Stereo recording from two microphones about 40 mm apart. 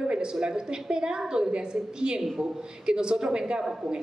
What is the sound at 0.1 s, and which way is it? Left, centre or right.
A woman's voice, right.